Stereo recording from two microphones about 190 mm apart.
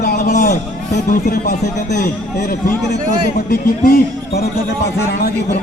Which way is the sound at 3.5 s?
55° left (ahead or behind).